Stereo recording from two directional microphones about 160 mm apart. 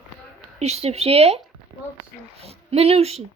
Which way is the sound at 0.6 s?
40° right (ahead or behind).